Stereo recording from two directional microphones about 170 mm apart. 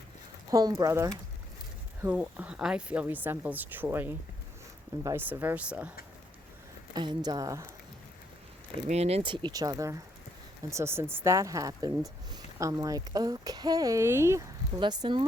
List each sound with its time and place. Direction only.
0.5 s a woman's voice: 20° right (ahead or behind)
6.9 s a woman's voice: 25° right (ahead or behind)
8.9 s a woman's voice: 40° right (ahead or behind); by 14.4 s 15° right (ahead or behind)
14.8 s a woman's voice: 25° right (ahead or behind)